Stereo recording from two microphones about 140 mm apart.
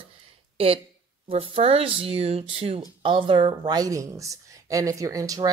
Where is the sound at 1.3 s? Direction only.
45° right (ahead or behind).